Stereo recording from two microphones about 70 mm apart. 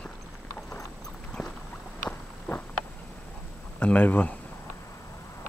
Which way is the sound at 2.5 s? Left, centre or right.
Left.